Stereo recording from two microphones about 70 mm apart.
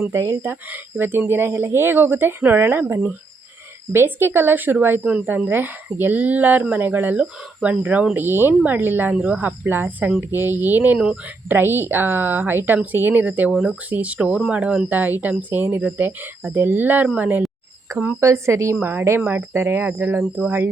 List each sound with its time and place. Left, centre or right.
0.1 s speech: right
0.7 s speech: right
13.5 s speech: centre
13.9 s speech: centre
18.2 s speech: right
18.8 s speech: right